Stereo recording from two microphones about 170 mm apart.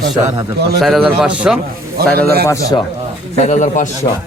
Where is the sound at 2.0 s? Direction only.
65° right (ahead or behind).